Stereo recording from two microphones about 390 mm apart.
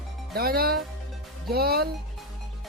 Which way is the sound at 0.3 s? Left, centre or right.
Right.